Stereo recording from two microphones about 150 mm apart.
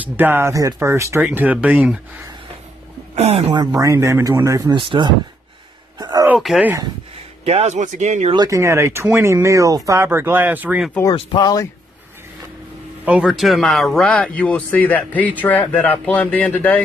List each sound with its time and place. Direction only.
0.0 s speech: 15° right (ahead or behind)
3.2 s speech: 45° right (ahead or behind)
3.7 s speech: 20° right (ahead or behind)
4.7 s speech: 35° right (ahead or behind)
5.9 s a sound: 25° right (ahead or behind)
6.4 s speech: centre (ahead or behind)
7.4 s speech: 45° right (ahead or behind)
8.4 s speech: 20° right (ahead or behind)
11.1 s speech: 30° left (ahead or behind)
13.0 s a man's voice: 5° right (ahead or behind); by 16.8 s 10° left (ahead or behind)